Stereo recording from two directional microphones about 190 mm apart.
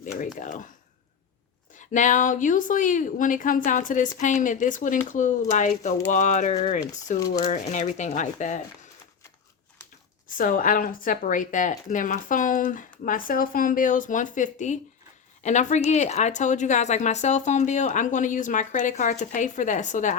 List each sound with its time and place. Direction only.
0.3 s a woman's voice: 45° left (ahead or behind)
1.7 s a woman's voice: 40° left (ahead or behind)
10.2 s a woman's voice: 45° left (ahead or behind)